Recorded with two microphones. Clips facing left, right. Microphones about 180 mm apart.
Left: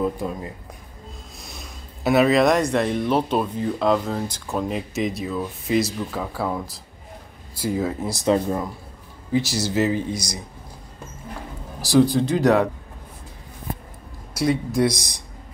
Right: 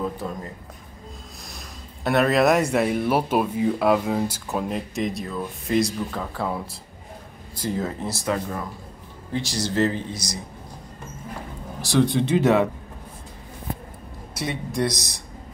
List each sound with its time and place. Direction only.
0.0 s speech: 10° left (ahead or behind)
7.5 s speech: 10° left (ahead or behind)
8.2 s speech: 25° left (ahead or behind)
9.3 s speech: 5° left (ahead or behind)
11.8 s speech: centre (ahead or behind)
14.3 s speech: centre (ahead or behind)